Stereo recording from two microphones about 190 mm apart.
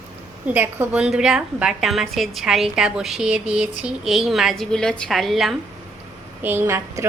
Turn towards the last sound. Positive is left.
turn(degrees=-15)  # may be behind; listen again after turning